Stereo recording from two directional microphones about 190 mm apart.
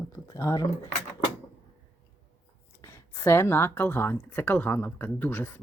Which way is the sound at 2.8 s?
15° left (ahead or behind).